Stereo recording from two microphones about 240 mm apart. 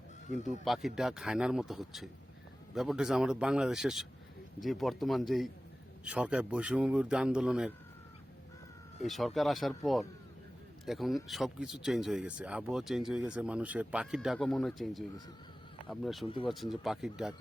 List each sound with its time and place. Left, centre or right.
0.6 s speech: centre
9.0 s speech: centre
16.2 s speech: left
16.5 s speech: centre